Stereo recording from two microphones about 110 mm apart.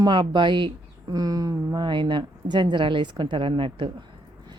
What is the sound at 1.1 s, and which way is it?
Speech, 35° right (ahead or behind).